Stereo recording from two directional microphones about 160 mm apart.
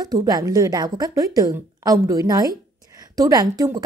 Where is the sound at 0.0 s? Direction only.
25° right (ahead or behind).